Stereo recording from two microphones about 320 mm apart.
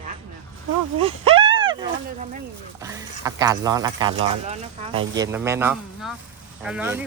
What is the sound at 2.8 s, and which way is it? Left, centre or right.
Speech, centre.